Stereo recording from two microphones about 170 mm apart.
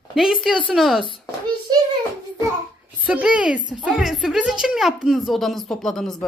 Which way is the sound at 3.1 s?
5° right (ahead or behind).